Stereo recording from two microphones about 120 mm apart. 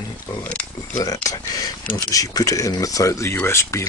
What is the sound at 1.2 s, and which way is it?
Speech, 30° left (ahead or behind).